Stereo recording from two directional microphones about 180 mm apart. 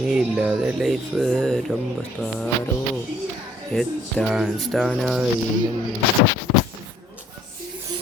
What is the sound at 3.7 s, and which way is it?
Speech, centre (ahead or behind).